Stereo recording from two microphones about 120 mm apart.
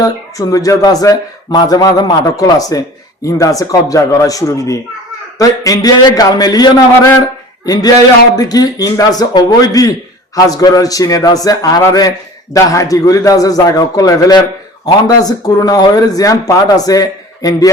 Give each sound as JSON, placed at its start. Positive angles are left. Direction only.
{"t": 0.0, "sound": "a man's voice", "side_deg": 30}